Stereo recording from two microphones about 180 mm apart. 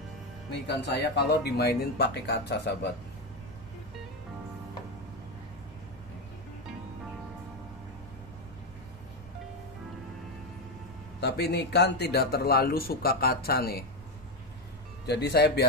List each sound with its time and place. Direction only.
0.7 s speech: 70° left (ahead or behind)
11.1 s a man's voice: 65° left (ahead or behind)
15.0 s speech: 65° left (ahead or behind)